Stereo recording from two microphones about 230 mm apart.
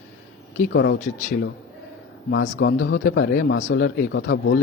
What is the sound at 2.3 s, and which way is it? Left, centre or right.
Speech, left.